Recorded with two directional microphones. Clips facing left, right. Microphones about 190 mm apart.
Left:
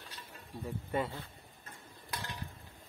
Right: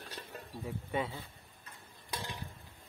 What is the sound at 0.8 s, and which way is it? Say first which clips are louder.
Speech: left 1 dB; centre (ahead or behind).